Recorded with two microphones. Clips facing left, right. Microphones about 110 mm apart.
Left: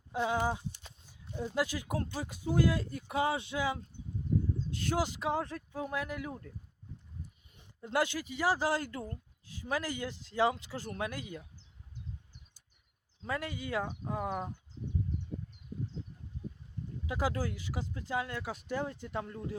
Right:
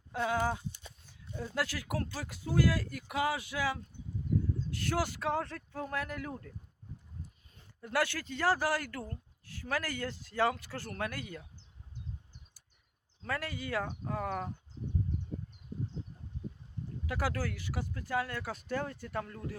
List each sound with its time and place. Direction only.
0.1 s speech: 15° left (ahead or behind)
7.5 s speech: 20° left (ahead or behind)
13.2 s speech: 20° left (ahead or behind)
17.1 s speech: 20° left (ahead or behind)